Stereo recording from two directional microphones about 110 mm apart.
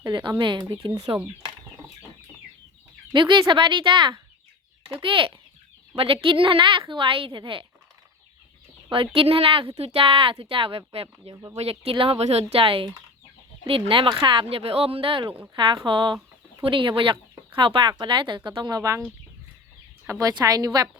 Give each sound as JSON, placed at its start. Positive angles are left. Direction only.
{"t": 0.0, "sound": "speech", "side_deg": -40}
{"t": 3.1, "sound": "speech", "side_deg": -45}
{"t": 8.9, "sound": "speech", "side_deg": -55}
{"t": 11.5, "sound": "speech", "side_deg": -70}
{"t": 20.1, "sound": "a woman's voice", "side_deg": -35}